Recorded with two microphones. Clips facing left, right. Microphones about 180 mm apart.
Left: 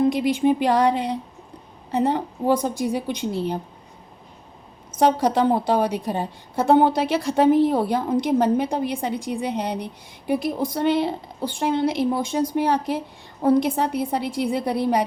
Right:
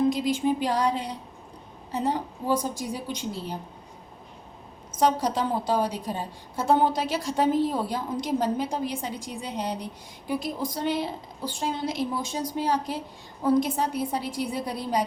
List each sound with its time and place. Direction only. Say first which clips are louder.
0.1 s a woman's voice: left 5 dB; 65° left (ahead or behind)
4.9 s a woman's voice: left 5 dB; 65° left (ahead or behind)